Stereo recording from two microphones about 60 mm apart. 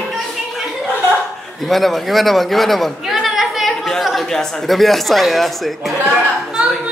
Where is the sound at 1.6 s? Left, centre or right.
Centre.